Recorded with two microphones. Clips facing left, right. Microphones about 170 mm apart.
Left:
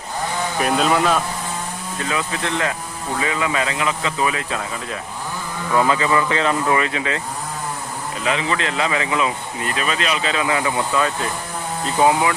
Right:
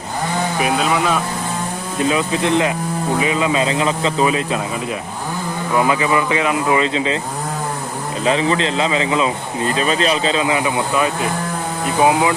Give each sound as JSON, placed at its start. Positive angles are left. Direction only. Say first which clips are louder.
{"t": 0.6, "sound": "speech", "louder": "left 1 dB", "side_deg": -5}
{"t": 2.0, "sound": "speech", "louder": "right 7 dB", "side_deg": -20}
{"t": 5.7, "sound": "speech", "louder": "right 1 dB", "side_deg": -15}
{"t": 8.2, "sound": "speech", "louder": "right 5 dB", "side_deg": -30}